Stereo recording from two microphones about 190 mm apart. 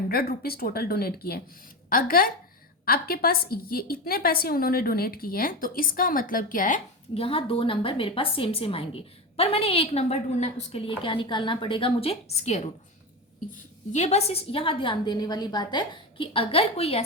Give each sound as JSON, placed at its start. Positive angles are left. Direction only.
{"t": 0.1, "sound": "a woman's voice", "side_deg": 55}
{"t": 7.1, "sound": "a woman's voice", "side_deg": 30}
{"t": 13.9, "sound": "a woman's voice", "side_deg": 35}